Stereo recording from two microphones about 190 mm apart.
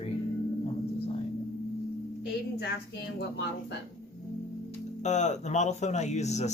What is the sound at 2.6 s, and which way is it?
Speech, 60° left (ahead or behind).